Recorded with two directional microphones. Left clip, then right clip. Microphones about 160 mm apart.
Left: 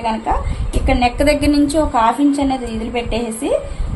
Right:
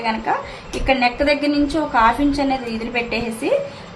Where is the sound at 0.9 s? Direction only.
30° left (ahead or behind).